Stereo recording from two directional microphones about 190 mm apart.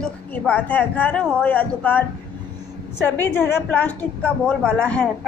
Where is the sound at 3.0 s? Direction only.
10° left (ahead or behind).